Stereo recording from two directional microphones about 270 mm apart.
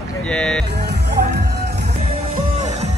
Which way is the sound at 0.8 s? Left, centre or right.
Right.